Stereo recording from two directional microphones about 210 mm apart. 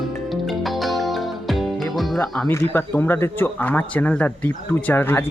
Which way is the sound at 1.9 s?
Centre (ahead or behind).